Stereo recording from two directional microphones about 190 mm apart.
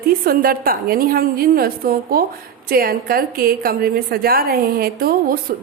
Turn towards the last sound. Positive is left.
turn(degrees=-50)  # may be behind; listen again after turning